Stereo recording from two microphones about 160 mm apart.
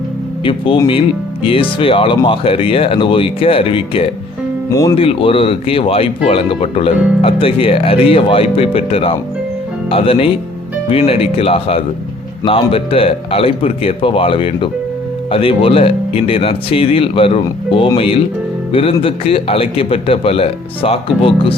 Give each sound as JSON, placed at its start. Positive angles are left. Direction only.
{"t": 0.4, "sound": "speech", "side_deg": 35}
{"t": 4.7, "sound": "speech", "side_deg": 20}
{"t": 4.9, "sound": "speech", "side_deg": 35}